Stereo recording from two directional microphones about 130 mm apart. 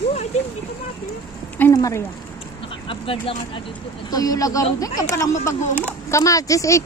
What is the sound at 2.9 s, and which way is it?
Speech, 45° left (ahead or behind).